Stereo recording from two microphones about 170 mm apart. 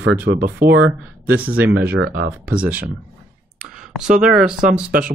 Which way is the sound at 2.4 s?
10° right (ahead or behind).